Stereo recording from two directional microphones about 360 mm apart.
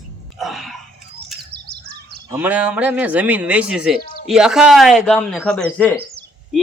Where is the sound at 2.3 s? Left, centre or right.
Centre.